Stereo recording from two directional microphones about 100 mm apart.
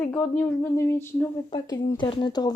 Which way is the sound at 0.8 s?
25° left (ahead or behind).